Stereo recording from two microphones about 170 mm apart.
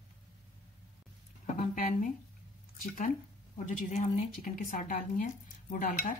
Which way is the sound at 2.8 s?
55° left (ahead or behind).